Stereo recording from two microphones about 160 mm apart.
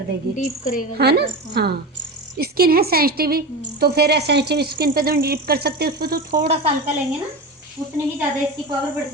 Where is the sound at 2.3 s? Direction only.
70° right (ahead or behind).